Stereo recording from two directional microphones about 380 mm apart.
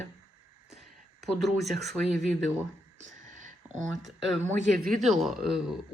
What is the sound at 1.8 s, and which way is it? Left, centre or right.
Speech, centre.